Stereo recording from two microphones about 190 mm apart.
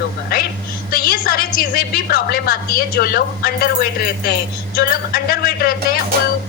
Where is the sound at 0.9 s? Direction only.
50° left (ahead or behind).